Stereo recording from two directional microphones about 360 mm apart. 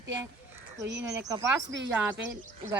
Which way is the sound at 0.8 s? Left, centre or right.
Right.